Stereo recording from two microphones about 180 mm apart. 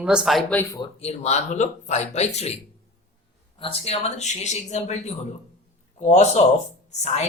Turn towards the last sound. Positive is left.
turn(degrees=40)  # may be behind; listen again after turning